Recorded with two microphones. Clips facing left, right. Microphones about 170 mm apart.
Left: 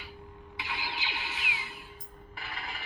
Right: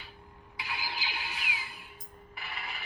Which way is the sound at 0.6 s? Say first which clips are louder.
Left 1 dB; 20° left (ahead or behind).